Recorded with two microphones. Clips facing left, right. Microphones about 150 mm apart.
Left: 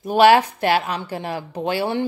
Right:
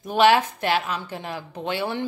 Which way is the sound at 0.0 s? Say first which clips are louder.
Left 4 dB; 40° left (ahead or behind).